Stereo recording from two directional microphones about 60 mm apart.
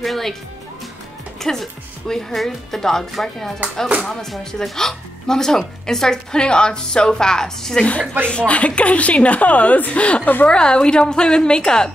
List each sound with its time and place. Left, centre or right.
0.0 s speech: centre
1.4 s speech: centre
8.3 s a woman's voice: centre